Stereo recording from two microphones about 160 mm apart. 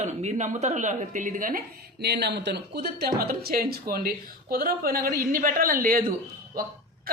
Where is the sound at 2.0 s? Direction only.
90° right; by 6.0 s 60° right (ahead or behind).